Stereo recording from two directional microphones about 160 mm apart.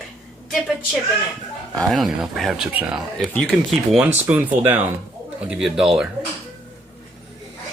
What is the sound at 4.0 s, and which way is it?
Speech, 10° right (ahead or behind).